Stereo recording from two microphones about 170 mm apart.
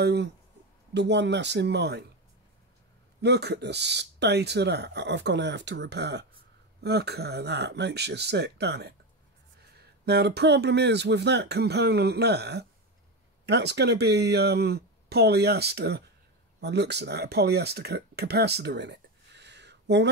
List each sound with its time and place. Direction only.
0.0 s speech: 80° right
3.2 s speech: 75° right (ahead or behind)